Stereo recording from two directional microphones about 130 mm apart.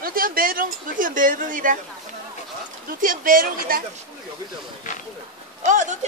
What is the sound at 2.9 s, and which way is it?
Speech, 90° right.